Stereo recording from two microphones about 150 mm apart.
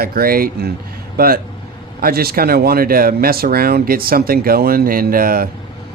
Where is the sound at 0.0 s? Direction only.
80° right.